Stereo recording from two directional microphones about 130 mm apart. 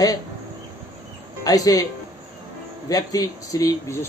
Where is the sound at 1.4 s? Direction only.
25° left (ahead or behind).